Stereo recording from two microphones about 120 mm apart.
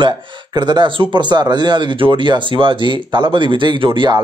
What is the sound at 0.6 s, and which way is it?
Speech, 40° right (ahead or behind).